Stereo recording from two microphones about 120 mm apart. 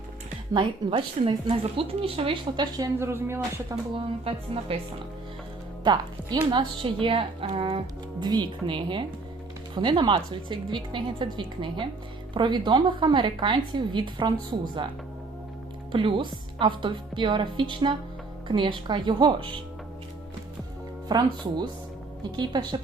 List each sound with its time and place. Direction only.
0.5 s a woman's voice: 45° right (ahead or behind)
2.7 s a woman's voice: 30° right (ahead or behind)
3.1 s speech: 20° right (ahead or behind)
3.9 s a woman's voice: 50° right (ahead or behind)
5.8 s a woman's voice: 35° right (ahead or behind); by 7.9 s 55° right (ahead or behind)
8.2 s a woman's voice: 35° right (ahead or behind)
15.9 s a woman's voice: 45° right (ahead or behind)
21.1 s a woman's voice: 35° right (ahead or behind)